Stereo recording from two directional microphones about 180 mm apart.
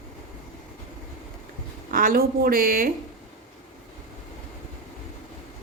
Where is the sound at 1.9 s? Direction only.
50° right (ahead or behind).